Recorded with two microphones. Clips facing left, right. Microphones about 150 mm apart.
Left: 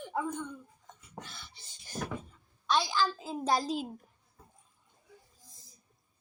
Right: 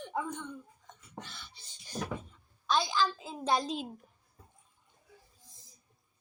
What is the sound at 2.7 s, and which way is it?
A child's voice, centre (ahead or behind).